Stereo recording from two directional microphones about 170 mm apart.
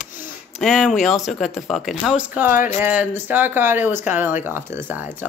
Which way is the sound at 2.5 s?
50° left (ahead or behind).